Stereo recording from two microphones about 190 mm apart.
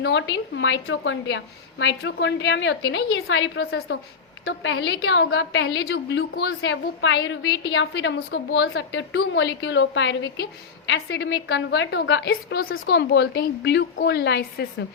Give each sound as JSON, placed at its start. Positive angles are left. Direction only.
{"t": 0.0, "sound": "a woman's voice", "side_deg": 70}
{"t": 4.4, "sound": "a woman's voice", "side_deg": 85}